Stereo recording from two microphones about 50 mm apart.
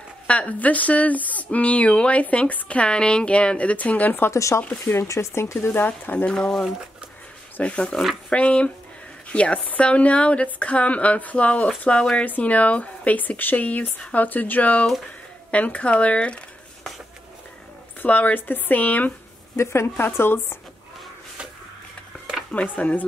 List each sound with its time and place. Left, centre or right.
0.3 s speech: left
4.3 s speech: left
5.7 s speech: left
6.3 s speech: centre
7.6 s speech: left
18.0 s speech: left
19.5 s a woman's voice: left
20.0 s speech: left
22.5 s speech: left